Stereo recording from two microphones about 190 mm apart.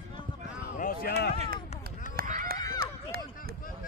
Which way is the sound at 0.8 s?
50° left (ahead or behind).